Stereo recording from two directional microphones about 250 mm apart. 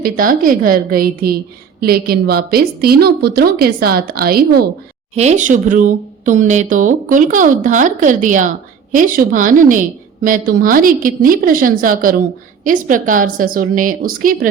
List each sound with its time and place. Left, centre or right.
0.0 s speech: right
5.1 s speech: right